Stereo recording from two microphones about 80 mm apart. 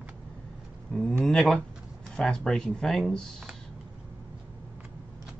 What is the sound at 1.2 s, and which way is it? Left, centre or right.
Speech, centre.